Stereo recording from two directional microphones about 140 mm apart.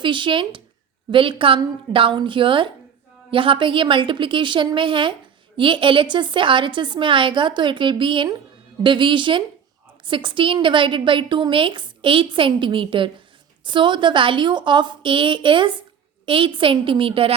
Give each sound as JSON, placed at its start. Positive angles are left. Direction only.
{"t": 0.0, "sound": "a woman's voice", "side_deg": -35}